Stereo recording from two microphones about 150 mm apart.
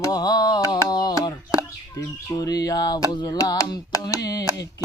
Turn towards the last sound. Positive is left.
turn(degrees=25)  # may be behind; listen again after turning